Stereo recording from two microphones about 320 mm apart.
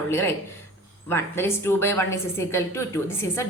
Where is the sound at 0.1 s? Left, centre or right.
Centre.